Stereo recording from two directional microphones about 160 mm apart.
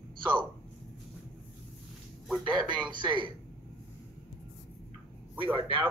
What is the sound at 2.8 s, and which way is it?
Speech, 30° right (ahead or behind).